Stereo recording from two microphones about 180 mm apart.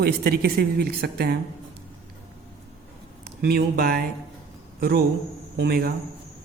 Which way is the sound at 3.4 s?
60° right (ahead or behind).